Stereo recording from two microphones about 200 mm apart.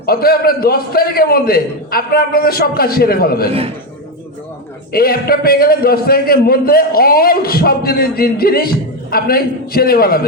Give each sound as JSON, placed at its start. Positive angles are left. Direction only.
{"t": 0.0, "sound": "a man's voice", "side_deg": 50}
{"t": 4.9, "sound": "a man's voice", "side_deg": 50}